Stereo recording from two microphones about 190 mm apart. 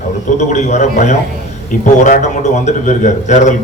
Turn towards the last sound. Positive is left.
turn(degrees=40)  # may be behind; listen again after turning